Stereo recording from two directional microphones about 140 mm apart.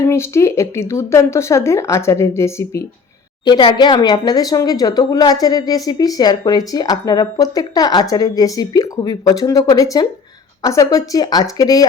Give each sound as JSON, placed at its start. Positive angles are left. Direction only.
{"t": 0.0, "sound": "speech", "side_deg": 20}
{"t": 3.4, "sound": "speech", "side_deg": 35}